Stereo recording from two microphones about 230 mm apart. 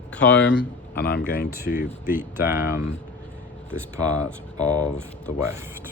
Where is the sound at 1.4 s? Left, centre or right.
Centre.